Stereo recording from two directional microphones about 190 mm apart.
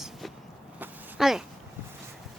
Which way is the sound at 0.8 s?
Centre (ahead or behind).